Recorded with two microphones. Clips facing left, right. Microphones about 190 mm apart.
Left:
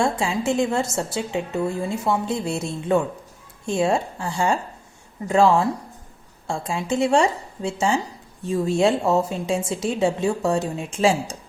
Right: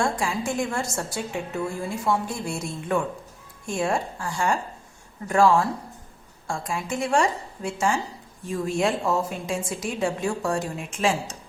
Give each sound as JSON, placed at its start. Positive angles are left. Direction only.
{"t": 0.0, "sound": "a woman's voice", "side_deg": 25}